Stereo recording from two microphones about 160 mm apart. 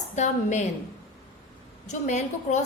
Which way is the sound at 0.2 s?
45° left (ahead or behind).